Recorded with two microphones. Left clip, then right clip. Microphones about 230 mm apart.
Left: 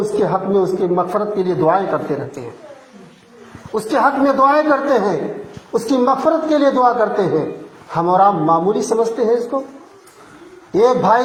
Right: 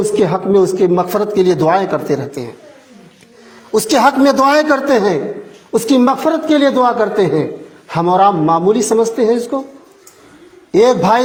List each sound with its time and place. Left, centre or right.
0.2 s a man's voice: right
3.7 s a man's voice: right